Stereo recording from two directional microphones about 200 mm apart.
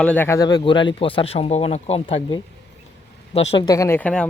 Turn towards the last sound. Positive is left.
turn(degrees=5)  # may be behind; listen again after turning